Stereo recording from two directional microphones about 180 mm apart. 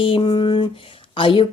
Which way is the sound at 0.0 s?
25° left (ahead or behind).